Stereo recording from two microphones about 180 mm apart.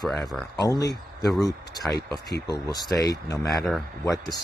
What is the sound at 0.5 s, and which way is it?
Speech, 20° left (ahead or behind).